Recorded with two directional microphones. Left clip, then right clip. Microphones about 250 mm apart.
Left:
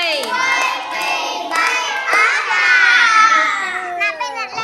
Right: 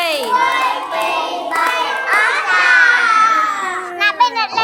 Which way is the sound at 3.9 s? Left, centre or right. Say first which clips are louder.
Right 10 dB; right.